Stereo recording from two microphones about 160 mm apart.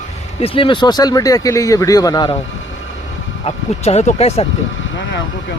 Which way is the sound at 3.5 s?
40° left (ahead or behind).